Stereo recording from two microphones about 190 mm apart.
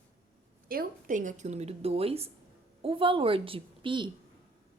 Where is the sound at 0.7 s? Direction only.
45° right (ahead or behind); by 4.1 s 25° right (ahead or behind).